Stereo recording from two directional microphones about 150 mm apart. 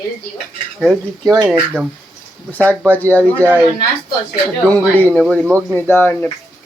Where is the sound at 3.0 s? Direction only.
10° left (ahead or behind).